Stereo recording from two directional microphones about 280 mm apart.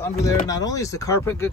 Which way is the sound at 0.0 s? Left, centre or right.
Centre.